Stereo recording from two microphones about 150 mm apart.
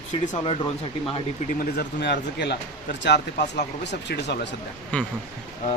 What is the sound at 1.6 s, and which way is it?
Speech, 90° left.